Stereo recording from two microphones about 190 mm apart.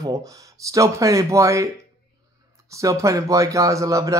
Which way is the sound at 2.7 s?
15° right (ahead or behind).